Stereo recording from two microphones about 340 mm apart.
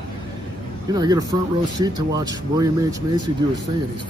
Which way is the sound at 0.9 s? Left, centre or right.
Centre.